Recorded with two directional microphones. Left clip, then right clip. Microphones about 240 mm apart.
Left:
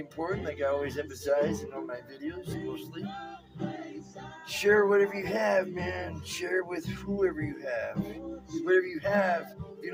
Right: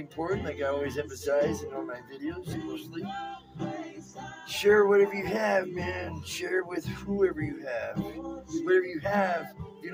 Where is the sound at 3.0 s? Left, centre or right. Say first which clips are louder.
Right 4 dB; right.